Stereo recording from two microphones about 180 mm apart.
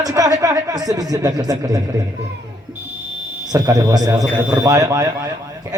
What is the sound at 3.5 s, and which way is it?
A man's voice, 20° right (ahead or behind).